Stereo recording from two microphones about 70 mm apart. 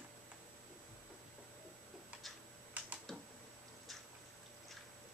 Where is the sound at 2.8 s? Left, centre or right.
Centre.